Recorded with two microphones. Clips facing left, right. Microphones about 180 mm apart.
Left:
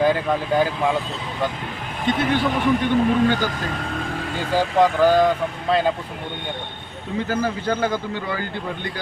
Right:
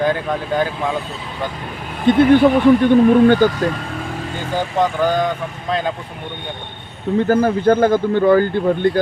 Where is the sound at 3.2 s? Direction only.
50° right (ahead or behind).